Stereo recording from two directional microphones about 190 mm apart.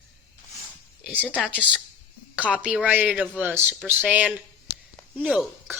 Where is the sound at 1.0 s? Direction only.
10° right (ahead or behind).